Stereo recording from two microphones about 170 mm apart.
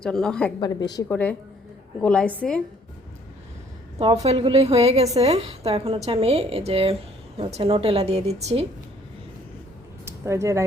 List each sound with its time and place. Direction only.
0.0 s a woman's voice: 5° left (ahead or behind)
0.6 s a woman's voice: 25° left (ahead or behind)
1.0 s a woman's voice: 10° left (ahead or behind)
3.9 s a woman's voice: 40° right (ahead or behind)
10.1 s speech: 15° right (ahead or behind)